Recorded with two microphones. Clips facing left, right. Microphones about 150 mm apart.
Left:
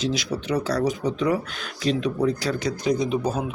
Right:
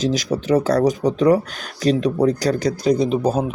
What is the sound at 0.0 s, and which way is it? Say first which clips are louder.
Speech: right 5 dB; 45° right (ahead or behind).